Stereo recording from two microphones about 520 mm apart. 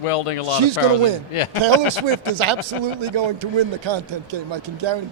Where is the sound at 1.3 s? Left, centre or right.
Left.